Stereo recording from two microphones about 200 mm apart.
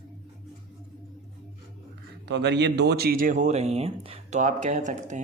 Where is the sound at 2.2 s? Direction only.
60° right (ahead or behind).